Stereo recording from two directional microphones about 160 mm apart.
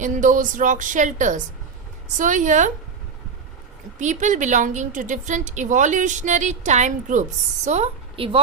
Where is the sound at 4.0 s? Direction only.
50° right (ahead or behind).